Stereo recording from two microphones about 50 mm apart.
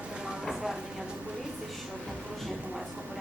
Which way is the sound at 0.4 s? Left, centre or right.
Centre.